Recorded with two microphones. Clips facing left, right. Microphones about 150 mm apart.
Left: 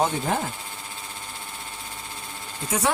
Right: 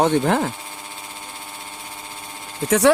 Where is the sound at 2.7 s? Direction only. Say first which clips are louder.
Right 10 dB; 80° right.